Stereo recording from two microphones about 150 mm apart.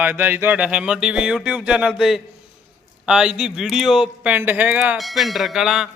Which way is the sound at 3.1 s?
5° right (ahead or behind).